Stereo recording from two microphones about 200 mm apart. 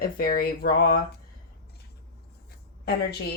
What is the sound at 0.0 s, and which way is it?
Speech, 45° left (ahead or behind).